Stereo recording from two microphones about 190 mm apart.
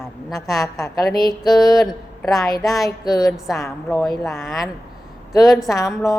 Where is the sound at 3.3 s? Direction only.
Centre (ahead or behind).